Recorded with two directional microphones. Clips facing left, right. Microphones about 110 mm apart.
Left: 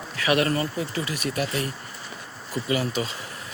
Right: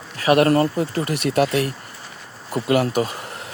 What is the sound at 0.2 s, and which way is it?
Speech, 45° right (ahead or behind).